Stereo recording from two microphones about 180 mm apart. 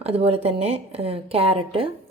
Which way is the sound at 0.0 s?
35° right (ahead or behind).